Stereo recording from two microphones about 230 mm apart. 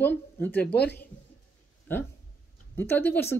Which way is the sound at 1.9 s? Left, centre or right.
Centre.